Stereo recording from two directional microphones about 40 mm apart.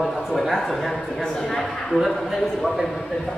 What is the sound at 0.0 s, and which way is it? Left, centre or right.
Speech, centre.